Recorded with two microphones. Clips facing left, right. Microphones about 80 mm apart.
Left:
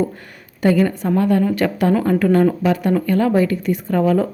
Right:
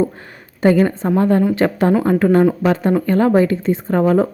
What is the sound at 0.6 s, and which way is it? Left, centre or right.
A woman's voice, right.